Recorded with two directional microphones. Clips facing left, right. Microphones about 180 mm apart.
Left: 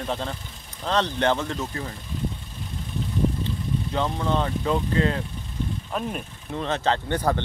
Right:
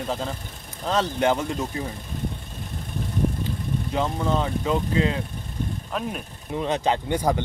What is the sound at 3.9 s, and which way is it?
Speech, 5° right (ahead or behind).